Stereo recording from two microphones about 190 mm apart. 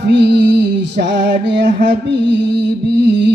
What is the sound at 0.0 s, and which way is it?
Music, 65° right (ahead or behind).